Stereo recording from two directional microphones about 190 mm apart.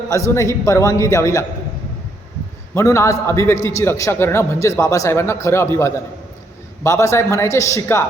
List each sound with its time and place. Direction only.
0.1 s a man's voice: 15° left (ahead or behind)
2.7 s a man's voice: 15° left (ahead or behind)